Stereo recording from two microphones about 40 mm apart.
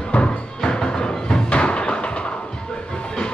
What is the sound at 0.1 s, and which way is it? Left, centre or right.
Music, left.